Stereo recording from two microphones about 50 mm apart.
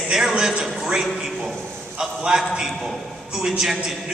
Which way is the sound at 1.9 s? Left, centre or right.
Centre.